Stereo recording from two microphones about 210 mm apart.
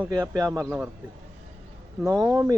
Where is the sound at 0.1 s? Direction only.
15° right (ahead or behind).